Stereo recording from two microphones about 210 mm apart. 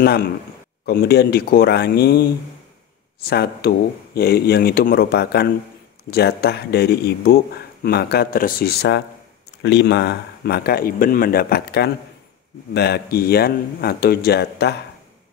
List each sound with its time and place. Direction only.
0.0 s speech: 50° left (ahead or behind)
3.3 s speech: 50° left (ahead or behind)